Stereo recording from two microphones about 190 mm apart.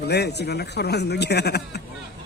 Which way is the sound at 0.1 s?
60° left (ahead or behind).